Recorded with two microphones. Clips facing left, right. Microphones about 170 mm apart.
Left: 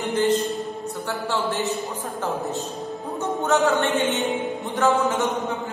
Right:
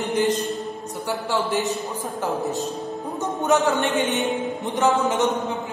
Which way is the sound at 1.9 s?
15° right (ahead or behind).